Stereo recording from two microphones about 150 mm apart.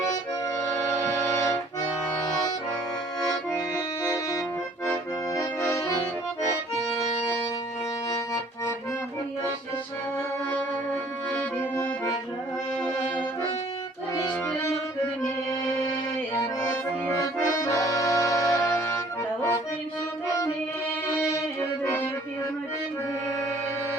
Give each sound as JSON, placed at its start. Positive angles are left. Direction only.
{"t": 1.3, "sound": "accordion", "side_deg": 20}
{"t": 4.0, "sound": "organ", "side_deg": 20}
{"t": 4.9, "sound": "accordion", "side_deg": 20}
{"t": 11.3, "sound": "music", "side_deg": 15}
{"t": 17.2, "sound": "accordion", "side_deg": 20}